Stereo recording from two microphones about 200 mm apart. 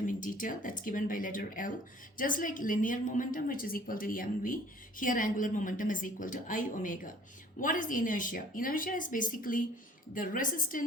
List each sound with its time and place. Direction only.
0.0 s a woman's voice: 40° left (ahead or behind)